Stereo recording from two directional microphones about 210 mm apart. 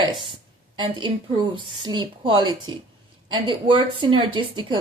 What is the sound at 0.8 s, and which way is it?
A woman's voice, 20° right (ahead or behind).